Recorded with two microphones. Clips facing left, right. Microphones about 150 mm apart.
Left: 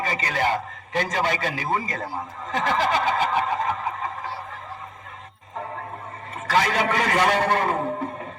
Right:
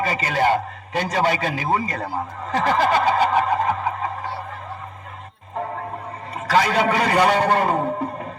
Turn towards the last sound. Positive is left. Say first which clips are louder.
# right 3 dB
turn(degrees=-35)  # may be behind; listen again after turning